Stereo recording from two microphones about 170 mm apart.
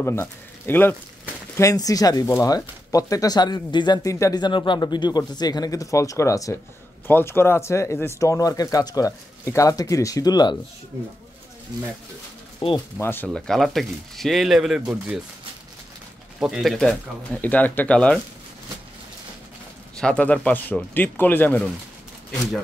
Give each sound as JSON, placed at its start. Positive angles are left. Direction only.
{"t": 0.0, "sound": "speech", "side_deg": 15}
{"t": 12.5, "sound": "speech", "side_deg": 25}
{"t": 12.9, "sound": "speech", "side_deg": 10}
{"t": 16.3, "sound": "speech", "side_deg": -5}
{"t": 20.0, "sound": "speech", "side_deg": 5}